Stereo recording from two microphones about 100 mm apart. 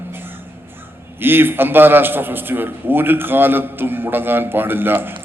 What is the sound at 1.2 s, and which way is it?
A man's voice, 20° right (ahead or behind).